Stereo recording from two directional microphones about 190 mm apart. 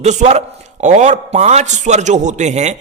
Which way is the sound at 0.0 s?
35° right (ahead or behind).